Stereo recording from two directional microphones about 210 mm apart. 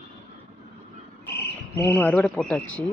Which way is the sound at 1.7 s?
10° left (ahead or behind).